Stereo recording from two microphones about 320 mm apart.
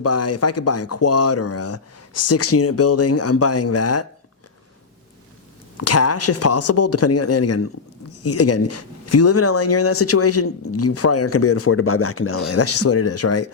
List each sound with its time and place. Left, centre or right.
0.0 s speech: left
5.7 s speech: left